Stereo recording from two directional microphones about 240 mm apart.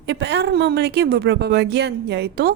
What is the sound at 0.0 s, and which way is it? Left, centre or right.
A woman's voice, right.